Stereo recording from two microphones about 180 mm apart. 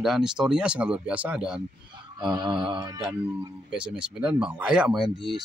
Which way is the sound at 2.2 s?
25° right (ahead or behind).